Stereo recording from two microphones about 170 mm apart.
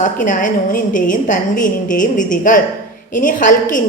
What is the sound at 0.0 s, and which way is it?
A woman's voice, 50° left (ahead or behind).